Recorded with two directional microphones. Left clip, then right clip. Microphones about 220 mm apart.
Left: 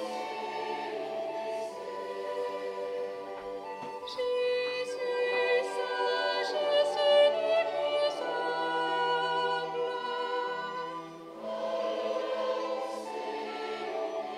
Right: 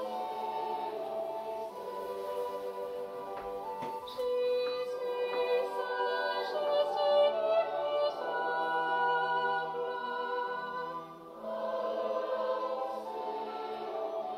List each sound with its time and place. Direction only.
4.2 s music: 25° left (ahead or behind)
11.6 s choir: 25° left (ahead or behind)